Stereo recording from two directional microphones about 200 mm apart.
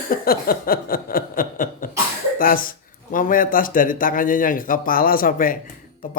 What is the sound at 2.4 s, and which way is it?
A man's voice, 45° left (ahead or behind).